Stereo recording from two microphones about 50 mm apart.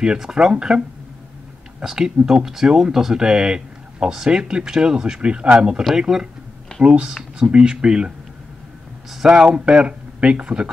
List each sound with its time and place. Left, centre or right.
0.0 s speech: centre
5.9 s speech: centre
6.8 s speech: right
9.3 s speech: centre